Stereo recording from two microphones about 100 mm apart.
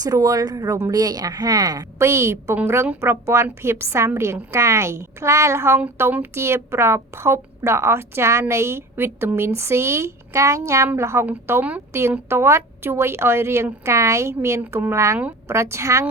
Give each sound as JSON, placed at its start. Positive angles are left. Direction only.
{"t": 0.0, "sound": "speech", "side_deg": -35}
{"t": 2.0, "sound": "a woman's voice", "side_deg": -25}